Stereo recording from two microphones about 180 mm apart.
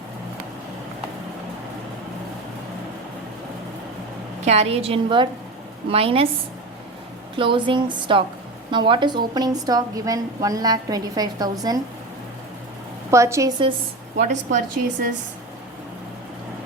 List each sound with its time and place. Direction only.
4.4 s a woman's voice: 35° right (ahead or behind)
7.3 s a woman's voice: 30° right (ahead or behind)
13.1 s a woman's voice: 15° right (ahead or behind)
14.2 s a woman's voice: 45° right (ahead or behind)